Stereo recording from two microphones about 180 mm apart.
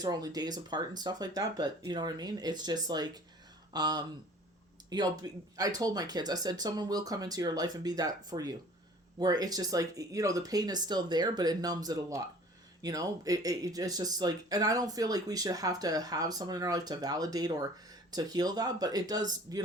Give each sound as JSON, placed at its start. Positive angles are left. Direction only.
{"t": 0.0, "sound": "speech", "side_deg": -20}